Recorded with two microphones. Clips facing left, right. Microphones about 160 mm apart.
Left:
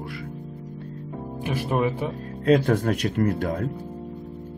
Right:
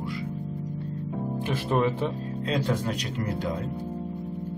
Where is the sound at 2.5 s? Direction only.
55° left (ahead or behind).